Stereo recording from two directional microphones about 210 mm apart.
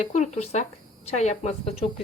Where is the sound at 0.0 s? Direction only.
35° left (ahead or behind).